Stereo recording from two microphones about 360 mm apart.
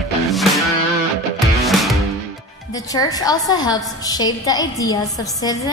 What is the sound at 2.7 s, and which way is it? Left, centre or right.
A woman's voice, centre.